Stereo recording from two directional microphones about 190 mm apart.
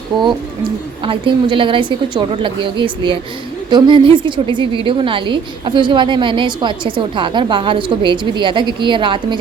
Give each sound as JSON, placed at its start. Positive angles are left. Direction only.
{"t": 0.1, "sound": "a woman's voice", "side_deg": -20}